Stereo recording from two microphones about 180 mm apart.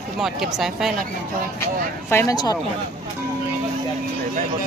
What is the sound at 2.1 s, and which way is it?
Speech, 15° left (ahead or behind).